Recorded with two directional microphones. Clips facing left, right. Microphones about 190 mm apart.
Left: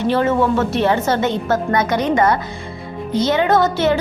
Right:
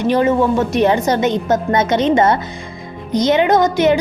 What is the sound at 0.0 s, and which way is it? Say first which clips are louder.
A woman's voice: right 2 dB; 15° right (ahead or behind).